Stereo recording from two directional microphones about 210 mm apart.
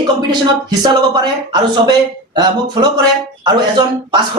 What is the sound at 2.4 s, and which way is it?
Speech, 20° right (ahead or behind).